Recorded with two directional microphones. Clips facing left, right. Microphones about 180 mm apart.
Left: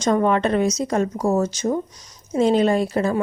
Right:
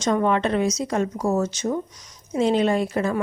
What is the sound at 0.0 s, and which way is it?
A woman's voice, 45° left (ahead or behind).